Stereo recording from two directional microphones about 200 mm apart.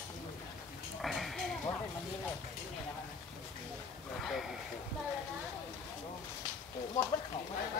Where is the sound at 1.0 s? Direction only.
Centre (ahead or behind).